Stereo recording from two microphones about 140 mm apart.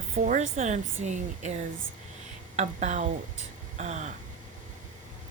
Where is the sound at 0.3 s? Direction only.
65° right (ahead or behind).